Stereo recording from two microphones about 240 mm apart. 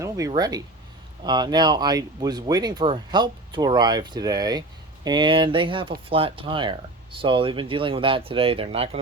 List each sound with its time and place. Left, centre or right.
0.0 s speech: centre